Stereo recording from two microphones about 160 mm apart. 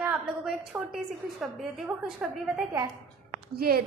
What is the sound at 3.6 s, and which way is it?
Speech, 70° right (ahead or behind).